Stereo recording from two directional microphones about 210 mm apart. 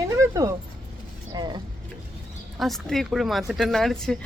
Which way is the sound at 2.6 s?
Centre (ahead or behind).